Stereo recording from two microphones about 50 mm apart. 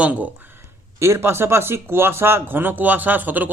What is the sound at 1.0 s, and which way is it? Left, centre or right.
Speech, right.